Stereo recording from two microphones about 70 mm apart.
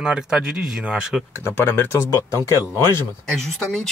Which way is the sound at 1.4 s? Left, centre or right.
Left.